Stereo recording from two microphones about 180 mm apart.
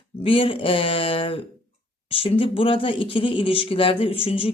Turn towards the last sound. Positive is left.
turn(degrees=30)  # may be behind; listen again after turning